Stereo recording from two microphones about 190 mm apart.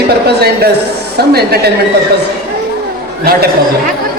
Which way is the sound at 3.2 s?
55° right (ahead or behind).